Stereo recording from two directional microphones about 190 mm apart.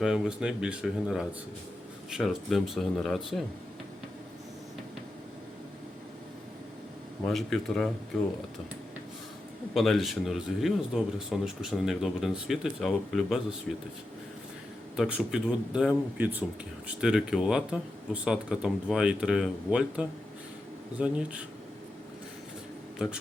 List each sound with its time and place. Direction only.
0.0 s speech: 5° right (ahead or behind)
7.3 s speech: centre (ahead or behind)
9.7 s speech: centre (ahead or behind)
14.9 s speech: 5° right (ahead or behind)
23.0 s speech: 5° right (ahead or behind)